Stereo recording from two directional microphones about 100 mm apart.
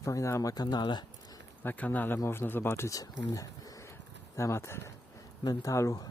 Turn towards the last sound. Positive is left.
turn(degrees=35)  # may be behind; listen again after turning